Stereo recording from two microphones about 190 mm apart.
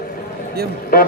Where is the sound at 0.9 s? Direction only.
50° left (ahead or behind).